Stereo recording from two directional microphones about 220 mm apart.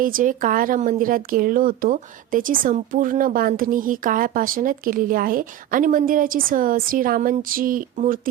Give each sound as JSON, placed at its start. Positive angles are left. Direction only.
{"t": 0.0, "sound": "a woman's voice", "side_deg": -40}